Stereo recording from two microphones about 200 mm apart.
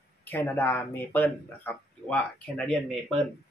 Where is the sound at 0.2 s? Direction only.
10° left (ahead or behind).